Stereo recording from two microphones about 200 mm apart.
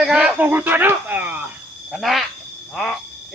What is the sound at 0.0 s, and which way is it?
Speech, 5° right (ahead or behind).